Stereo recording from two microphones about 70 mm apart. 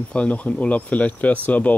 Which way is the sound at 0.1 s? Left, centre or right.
Centre.